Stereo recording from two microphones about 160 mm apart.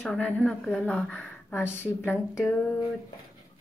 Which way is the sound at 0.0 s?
10° left (ahead or behind).